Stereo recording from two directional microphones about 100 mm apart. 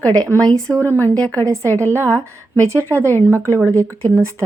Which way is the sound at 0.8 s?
20° left (ahead or behind).